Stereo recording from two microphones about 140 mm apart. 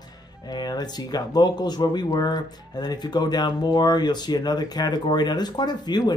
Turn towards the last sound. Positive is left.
turn(degrees=30)  # may be behind; listen again after turning